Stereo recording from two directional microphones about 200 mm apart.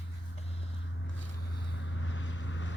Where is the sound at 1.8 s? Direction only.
75° left (ahead or behind).